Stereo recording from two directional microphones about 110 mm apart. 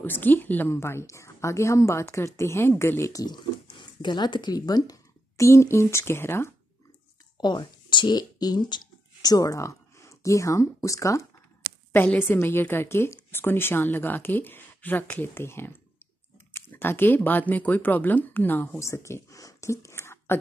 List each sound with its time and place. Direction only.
0.0 s a woman's voice: 15° left (ahead or behind)
3.7 s a woman's voice: 45° left (ahead or behind); by 6.5 s 20° left (ahead or behind)
7.3 s speech: 45° left (ahead or behind)
11.9 s a woman's voice: 15° left (ahead or behind)